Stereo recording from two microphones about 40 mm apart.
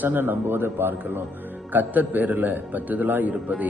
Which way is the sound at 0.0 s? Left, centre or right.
Right.